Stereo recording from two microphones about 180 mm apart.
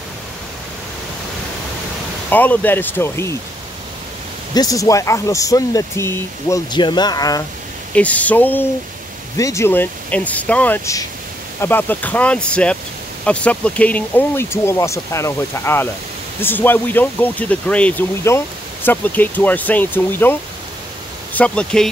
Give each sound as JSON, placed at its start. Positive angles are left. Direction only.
{"t": 2.2, "sound": "speech", "side_deg": 10}
{"t": 4.6, "sound": "speech", "side_deg": 20}
{"t": 7.9, "sound": "speech", "side_deg": 10}